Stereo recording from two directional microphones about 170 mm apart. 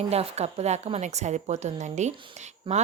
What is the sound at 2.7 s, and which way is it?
Speech, 30° right (ahead or behind).